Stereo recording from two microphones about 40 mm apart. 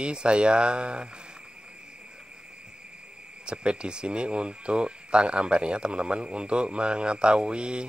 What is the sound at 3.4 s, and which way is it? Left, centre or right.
Speech, right.